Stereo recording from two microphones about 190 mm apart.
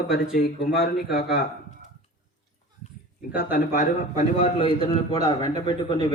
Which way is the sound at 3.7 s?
40° left (ahead or behind).